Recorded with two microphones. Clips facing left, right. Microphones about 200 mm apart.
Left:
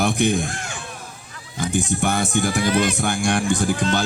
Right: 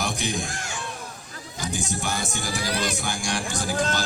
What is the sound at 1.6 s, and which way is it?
Speech, 55° left (ahead or behind).